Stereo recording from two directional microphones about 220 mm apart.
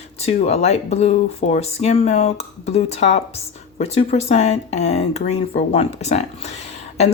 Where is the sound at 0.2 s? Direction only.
30° left (ahead or behind).